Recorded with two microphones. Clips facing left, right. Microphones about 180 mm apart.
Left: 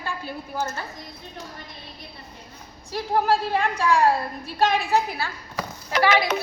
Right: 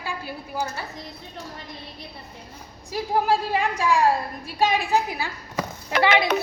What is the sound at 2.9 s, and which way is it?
A woman's voice, 10° right (ahead or behind).